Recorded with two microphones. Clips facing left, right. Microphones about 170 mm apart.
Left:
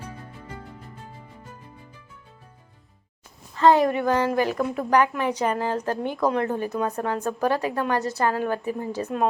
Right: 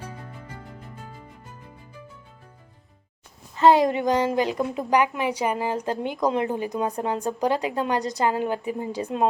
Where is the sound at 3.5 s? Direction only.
15° right (ahead or behind).